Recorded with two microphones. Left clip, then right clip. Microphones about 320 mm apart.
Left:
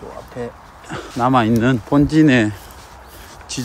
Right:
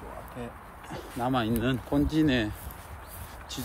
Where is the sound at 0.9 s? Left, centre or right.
Centre.